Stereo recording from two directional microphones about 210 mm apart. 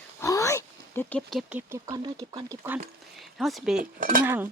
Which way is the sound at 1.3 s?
5° right (ahead or behind).